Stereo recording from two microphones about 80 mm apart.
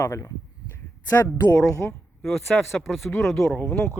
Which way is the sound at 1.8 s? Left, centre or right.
Left.